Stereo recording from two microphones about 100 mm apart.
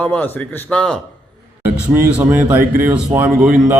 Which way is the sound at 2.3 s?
20° right (ahead or behind).